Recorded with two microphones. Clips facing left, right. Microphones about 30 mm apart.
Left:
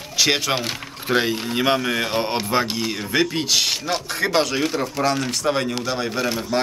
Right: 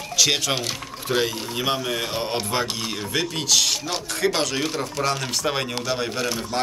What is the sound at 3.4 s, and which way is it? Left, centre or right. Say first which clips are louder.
Speech: left 1 dB; left.